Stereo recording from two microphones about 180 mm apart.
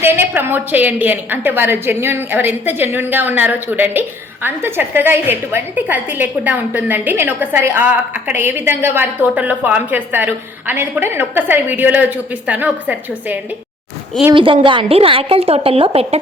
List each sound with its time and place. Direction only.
0.0 s a woman's voice: 10° right (ahead or behind)
14.3 s a woman's voice: 30° right (ahead or behind)